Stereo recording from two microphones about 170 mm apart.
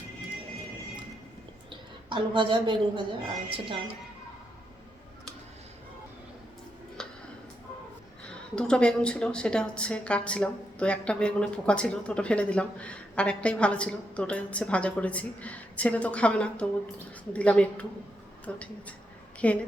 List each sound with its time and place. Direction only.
2.0 s a woman's voice: 30° right (ahead or behind)
8.5 s a woman's voice: 5° left (ahead or behind)